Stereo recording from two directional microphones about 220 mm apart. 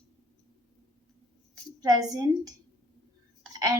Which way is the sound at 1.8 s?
15° right (ahead or behind).